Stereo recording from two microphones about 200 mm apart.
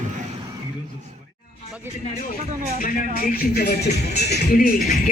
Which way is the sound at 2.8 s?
45° left (ahead or behind).